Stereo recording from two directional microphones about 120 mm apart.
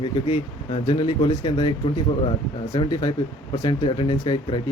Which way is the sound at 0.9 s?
40° left (ahead or behind).